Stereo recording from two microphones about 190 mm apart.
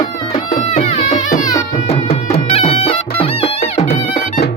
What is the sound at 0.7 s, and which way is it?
Music, 40° left (ahead or behind).